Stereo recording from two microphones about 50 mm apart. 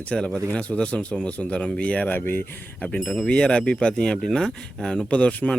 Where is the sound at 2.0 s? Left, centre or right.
Left.